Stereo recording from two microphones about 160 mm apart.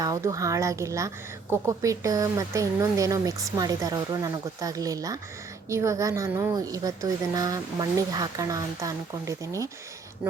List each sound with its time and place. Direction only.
0.0 s speech: 20° right (ahead or behind)